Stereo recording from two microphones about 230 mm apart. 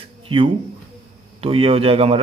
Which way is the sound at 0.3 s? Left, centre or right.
Right.